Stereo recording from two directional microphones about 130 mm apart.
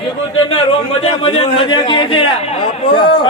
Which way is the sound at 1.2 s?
45° left (ahead or behind).